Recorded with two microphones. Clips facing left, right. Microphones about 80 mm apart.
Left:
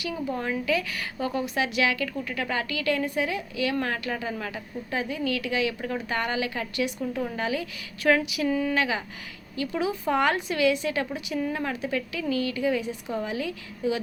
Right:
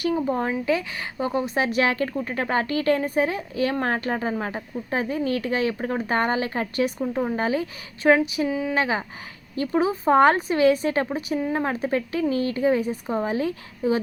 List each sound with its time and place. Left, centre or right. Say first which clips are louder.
0.0 s speech: right 6 dB; right
8.4 s speech: even; centre
8.7 s speech: right 3 dB; right